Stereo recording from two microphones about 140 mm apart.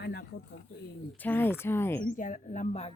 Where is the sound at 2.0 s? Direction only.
70° left (ahead or behind); by 2.9 s 55° left (ahead or behind).